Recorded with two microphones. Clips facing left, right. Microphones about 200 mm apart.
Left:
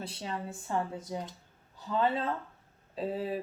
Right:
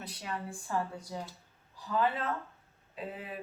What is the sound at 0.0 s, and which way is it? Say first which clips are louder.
Speech: left 2 dB; 25° left (ahead or behind).